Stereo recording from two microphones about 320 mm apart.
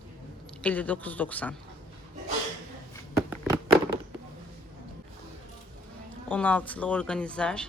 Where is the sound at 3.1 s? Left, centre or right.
Centre.